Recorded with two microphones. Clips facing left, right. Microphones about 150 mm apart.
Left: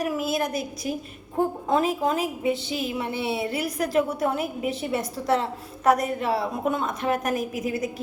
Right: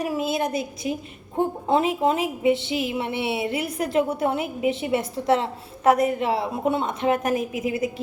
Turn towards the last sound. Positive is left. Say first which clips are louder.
# right 2 dB
turn(degrees=-25)  # may be behind; listen again after turning